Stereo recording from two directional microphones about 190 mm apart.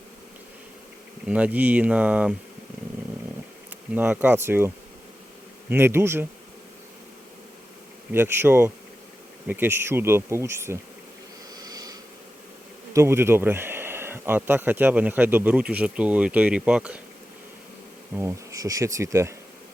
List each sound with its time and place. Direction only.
1.2 s speech: 5° right (ahead or behind)
3.7 s speech: 10° right (ahead or behind)
8.1 s speech: 10° right (ahead or behind)
11.5 s a sound: 20° right (ahead or behind)
12.9 s speech: 15° right (ahead or behind)
18.1 s speech: 15° right (ahead or behind)